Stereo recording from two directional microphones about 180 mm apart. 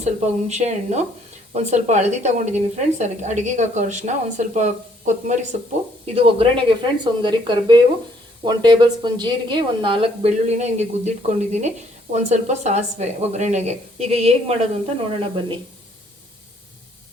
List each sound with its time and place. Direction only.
0.0 s a woman's voice: 40° right (ahead or behind)
6.1 s a woman's voice: 30° right (ahead or behind)